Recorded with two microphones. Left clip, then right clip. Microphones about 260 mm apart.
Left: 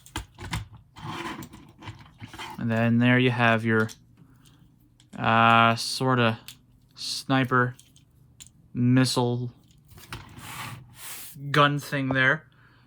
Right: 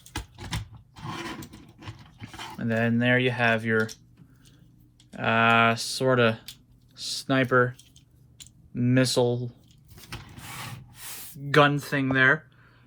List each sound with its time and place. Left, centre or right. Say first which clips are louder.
0.3 s a sound: left 1 dB; centre
1.9 s dog: even; centre
5.1 s speech: left 2 dB; centre
10.2 s mechanisms: left 1 dB; centre